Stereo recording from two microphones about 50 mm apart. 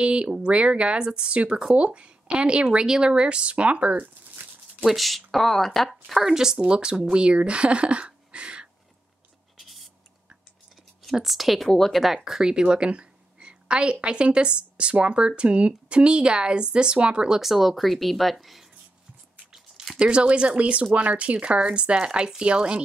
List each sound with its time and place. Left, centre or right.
0.0 s speech: right
4.4 s a sound: right
4.8 s speech: centre
6.2 s speech: centre
9.6 s writing: centre
11.2 s speech: centre
12.3 s a woman's voice: centre
17.4 s speech: centre
19.5 s a sound: centre
20.0 s speech: right